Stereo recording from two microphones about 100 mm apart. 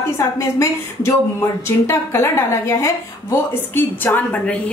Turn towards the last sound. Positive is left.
turn(degrees=15)  # may be behind; listen again after turning